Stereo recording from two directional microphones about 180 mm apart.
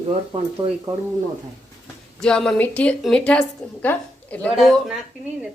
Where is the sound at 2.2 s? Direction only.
5° left (ahead or behind).